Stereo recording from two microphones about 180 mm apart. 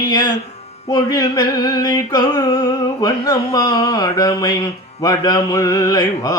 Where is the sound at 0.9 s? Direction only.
20° left (ahead or behind).